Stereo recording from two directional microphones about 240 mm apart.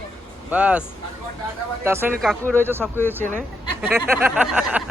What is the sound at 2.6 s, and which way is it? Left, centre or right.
Speech, centre.